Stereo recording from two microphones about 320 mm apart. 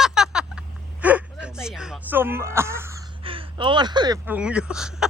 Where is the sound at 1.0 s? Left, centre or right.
Centre.